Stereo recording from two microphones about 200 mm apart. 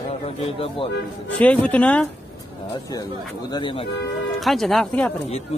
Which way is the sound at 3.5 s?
25° left (ahead or behind).